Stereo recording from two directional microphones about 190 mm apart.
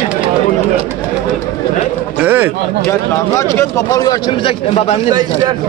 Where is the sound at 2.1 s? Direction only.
10° right (ahead or behind).